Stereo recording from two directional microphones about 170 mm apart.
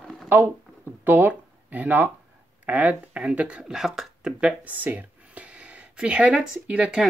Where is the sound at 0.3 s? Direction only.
10° right (ahead or behind).